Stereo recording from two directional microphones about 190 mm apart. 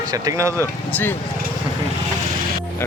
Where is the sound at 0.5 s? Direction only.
10° left (ahead or behind).